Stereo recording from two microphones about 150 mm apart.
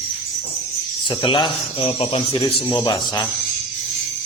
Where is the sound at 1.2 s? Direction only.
35° left (ahead or behind).